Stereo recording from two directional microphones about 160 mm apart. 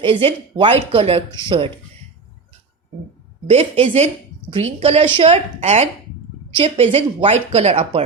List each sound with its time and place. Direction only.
0.0 s a woman's voice: 35° right (ahead or behind)
3.5 s a woman's voice: 40° right (ahead or behind)